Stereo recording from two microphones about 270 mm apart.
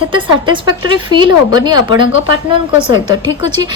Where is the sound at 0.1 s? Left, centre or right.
Centre.